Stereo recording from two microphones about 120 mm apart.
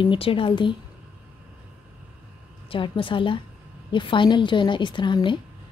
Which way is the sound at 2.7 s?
45° left (ahead or behind).